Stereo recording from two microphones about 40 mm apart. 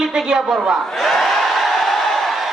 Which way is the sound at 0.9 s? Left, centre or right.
Centre.